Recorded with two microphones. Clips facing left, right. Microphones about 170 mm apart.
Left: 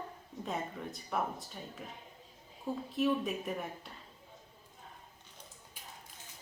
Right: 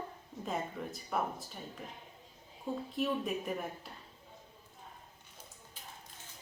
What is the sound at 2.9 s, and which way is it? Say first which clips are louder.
Speech: left 3 dB; centre (ahead or behind).